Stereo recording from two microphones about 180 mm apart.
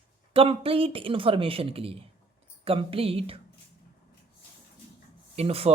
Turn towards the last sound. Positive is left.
turn(degrees=-35)  # may be behind; listen again after turning